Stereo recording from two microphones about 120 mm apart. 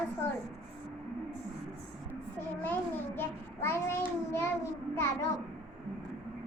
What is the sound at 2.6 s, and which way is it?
A child's voice, 15° left (ahead or behind).